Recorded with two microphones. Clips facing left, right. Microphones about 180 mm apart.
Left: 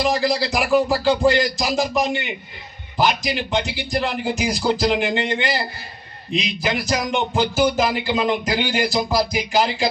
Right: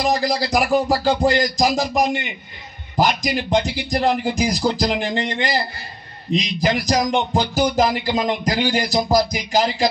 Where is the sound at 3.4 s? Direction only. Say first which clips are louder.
Right 4 dB; 40° right (ahead or behind).